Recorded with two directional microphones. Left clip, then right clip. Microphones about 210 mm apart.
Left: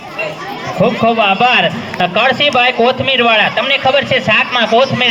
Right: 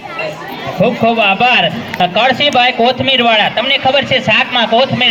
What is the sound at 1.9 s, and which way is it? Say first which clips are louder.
A man's voice: right 1 dB; 5° left (ahead or behind).